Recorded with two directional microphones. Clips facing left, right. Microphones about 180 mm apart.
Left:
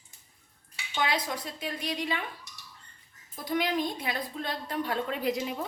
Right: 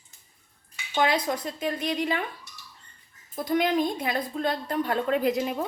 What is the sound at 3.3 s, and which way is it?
A woman's voice, 50° right (ahead or behind).